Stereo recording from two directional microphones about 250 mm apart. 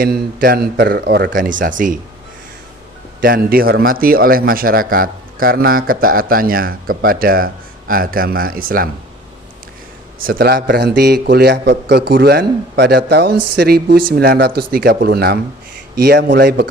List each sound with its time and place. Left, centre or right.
0.0 s a man's voice: right
3.2 s a man's voice: right
10.2 s a man's voice: right